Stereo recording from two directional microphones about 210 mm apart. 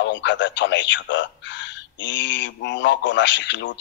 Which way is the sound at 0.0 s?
60° left (ahead or behind).